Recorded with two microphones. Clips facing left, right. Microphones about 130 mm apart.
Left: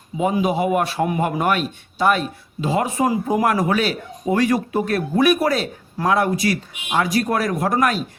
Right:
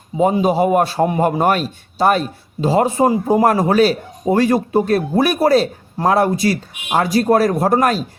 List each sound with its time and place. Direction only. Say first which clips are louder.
0.2 s a man's voice: right 5 dB; 35° right (ahead or behind)